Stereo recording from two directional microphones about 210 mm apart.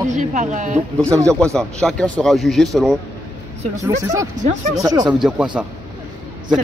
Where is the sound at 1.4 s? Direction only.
Centre (ahead or behind).